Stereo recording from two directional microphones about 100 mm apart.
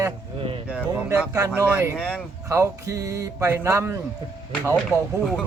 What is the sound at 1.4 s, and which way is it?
Speech, 35° right (ahead or behind).